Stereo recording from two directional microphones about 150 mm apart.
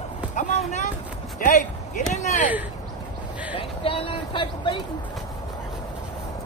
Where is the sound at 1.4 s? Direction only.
60° left (ahead or behind).